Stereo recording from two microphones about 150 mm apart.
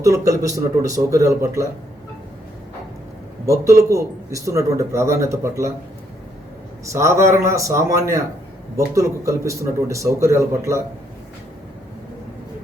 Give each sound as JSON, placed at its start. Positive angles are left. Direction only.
{"t": 0.0, "sound": "a man's voice", "side_deg": -20}
{"t": 3.4, "sound": "a man's voice", "side_deg": -20}
{"t": 6.8, "sound": "a man's voice", "side_deg": -20}